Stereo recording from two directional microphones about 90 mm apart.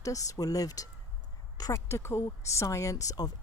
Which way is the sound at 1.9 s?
30° left (ahead or behind).